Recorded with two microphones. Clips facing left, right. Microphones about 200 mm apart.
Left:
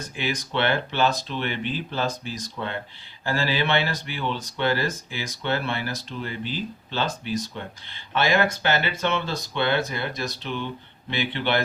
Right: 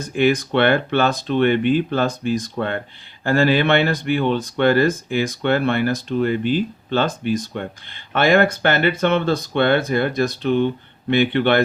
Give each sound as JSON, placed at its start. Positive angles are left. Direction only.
{"t": 0.2, "sound": "speech", "side_deg": -55}